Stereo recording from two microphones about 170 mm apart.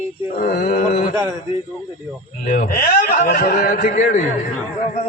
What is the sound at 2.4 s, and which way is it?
A man's voice, 50° left (ahead or behind).